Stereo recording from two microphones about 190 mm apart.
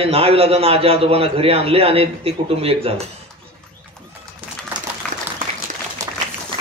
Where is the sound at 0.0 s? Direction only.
30° right (ahead or behind).